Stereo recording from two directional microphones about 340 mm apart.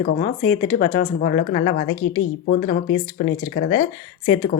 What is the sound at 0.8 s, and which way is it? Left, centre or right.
Speech, left.